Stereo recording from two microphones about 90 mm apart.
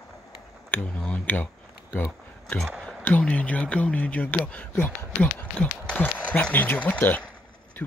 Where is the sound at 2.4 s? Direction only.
5° left (ahead or behind).